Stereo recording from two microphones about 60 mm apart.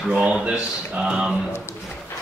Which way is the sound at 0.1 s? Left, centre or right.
Centre.